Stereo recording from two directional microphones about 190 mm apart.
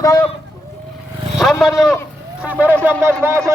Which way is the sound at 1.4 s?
Centre (ahead or behind).